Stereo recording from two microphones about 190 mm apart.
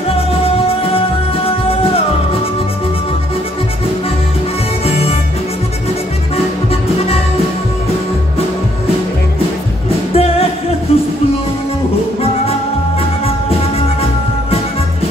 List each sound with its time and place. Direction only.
0.3 s music: 30° left (ahead or behind)
4.8 s music: 30° left (ahead or behind)
6.3 s music: 30° left (ahead or behind)
10.1 s music: 30° left (ahead or behind)
13.2 s music: 30° left (ahead or behind)